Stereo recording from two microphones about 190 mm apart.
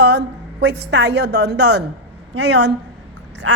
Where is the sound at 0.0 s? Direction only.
65° right (ahead or behind).